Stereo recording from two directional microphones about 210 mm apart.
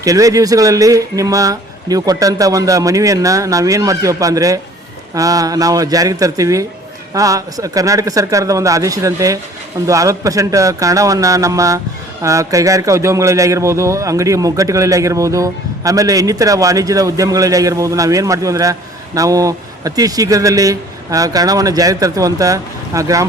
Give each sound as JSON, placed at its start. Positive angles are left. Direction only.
{"t": 0.0, "sound": "speech", "side_deg": -15}